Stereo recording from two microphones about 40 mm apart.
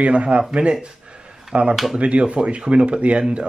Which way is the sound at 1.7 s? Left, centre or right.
Centre.